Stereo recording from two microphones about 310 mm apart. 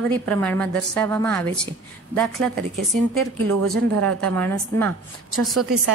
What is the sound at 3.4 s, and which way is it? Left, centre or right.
Speech, right.